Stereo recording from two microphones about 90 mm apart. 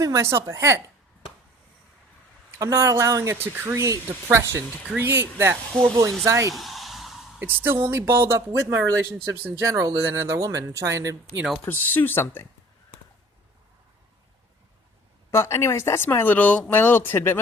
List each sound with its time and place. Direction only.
0.0 s speech: 35° right (ahead or behind)
2.6 s speech: 35° right (ahead or behind)
3.3 s speech: 25° right (ahead or behind)
6.5 s a sound: centre (ahead or behind)
7.3 s speech: 20° right (ahead or behind)
11.7 s speech: 20° left (ahead or behind)
15.3 s speech: 30° left (ahead or behind)